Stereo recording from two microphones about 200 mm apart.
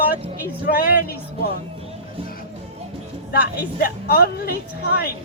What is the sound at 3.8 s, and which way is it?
Speech, 50° left (ahead or behind).